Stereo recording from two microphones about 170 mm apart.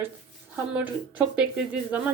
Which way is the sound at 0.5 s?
10° right (ahead or behind).